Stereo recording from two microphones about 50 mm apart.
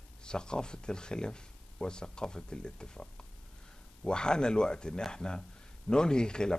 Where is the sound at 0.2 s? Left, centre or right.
Centre.